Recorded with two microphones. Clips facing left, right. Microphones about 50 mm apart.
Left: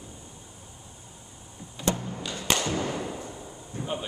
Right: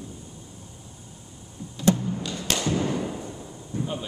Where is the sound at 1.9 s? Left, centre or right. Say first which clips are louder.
Right 6 dB; centre.